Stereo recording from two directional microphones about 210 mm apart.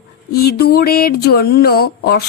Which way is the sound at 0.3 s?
50° left (ahead or behind).